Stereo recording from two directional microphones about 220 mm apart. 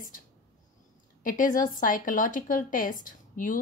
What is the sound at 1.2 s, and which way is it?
A woman's voice, 35° left (ahead or behind).